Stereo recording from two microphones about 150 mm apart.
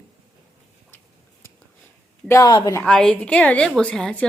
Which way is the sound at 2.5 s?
30° left (ahead or behind).